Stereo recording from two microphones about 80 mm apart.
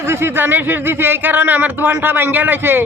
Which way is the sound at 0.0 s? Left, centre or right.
Right.